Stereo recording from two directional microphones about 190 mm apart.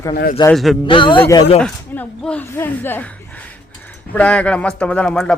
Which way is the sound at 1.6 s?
5° left (ahead or behind).